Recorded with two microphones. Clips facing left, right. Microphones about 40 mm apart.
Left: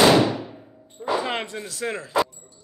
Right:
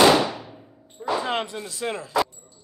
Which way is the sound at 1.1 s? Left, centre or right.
Centre.